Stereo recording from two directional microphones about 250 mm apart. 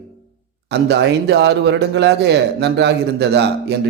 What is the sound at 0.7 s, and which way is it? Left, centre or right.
A man's voice, right.